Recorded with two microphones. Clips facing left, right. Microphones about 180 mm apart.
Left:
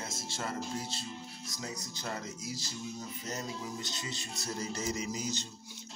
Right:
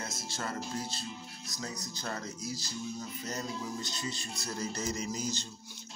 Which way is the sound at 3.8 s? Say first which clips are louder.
Right 2 dB; 20° left (ahead or behind).